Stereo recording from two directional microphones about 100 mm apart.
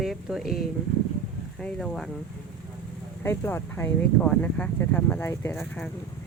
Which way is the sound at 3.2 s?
25° left (ahead or behind).